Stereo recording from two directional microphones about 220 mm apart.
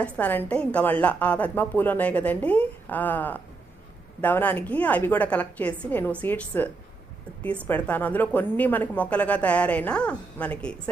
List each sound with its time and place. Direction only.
0.0 s a woman's voice: 5° left (ahead or behind)
7.7 s a woman's voice: 10° left (ahead or behind)